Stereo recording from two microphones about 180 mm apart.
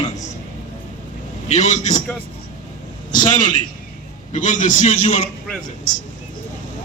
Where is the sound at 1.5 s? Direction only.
40° left (ahead or behind).